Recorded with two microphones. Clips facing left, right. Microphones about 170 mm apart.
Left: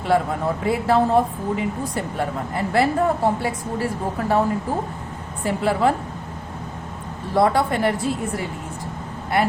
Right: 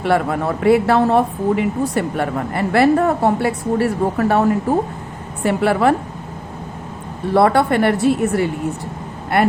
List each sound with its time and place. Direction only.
0.0 s speech: 70° right (ahead or behind)
7.3 s speech: 65° right (ahead or behind)